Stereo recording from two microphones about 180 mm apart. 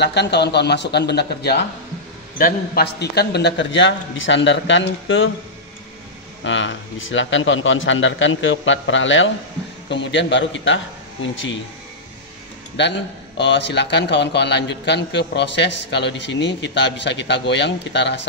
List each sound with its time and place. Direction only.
0.0 s a man's voice: 70° left (ahead or behind)
2.3 s a man's voice: 55° left (ahead or behind); by 5.3 s 90° left
6.4 s a man's voice: 90° left
12.8 s a man's voice: 80° left